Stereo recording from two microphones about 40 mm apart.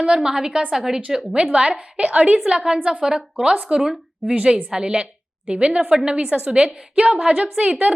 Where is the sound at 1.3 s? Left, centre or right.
Right.